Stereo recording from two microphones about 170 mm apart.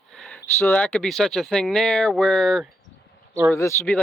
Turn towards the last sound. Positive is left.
turn(degrees=15)  # may be behind; listen again after turning